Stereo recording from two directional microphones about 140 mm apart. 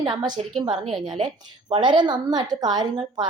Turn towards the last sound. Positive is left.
turn(degrees=-30)  # may be behind; listen again after turning